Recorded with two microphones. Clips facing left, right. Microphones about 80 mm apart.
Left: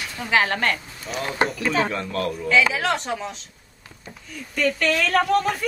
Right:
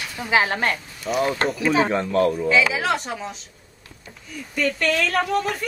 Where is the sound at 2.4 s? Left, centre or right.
Centre.